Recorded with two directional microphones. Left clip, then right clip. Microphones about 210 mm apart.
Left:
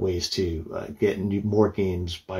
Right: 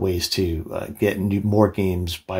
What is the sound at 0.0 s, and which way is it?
Speech, 45° right (ahead or behind).